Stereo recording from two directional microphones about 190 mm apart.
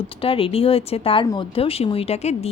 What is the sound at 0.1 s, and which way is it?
Speech, 30° left (ahead or behind).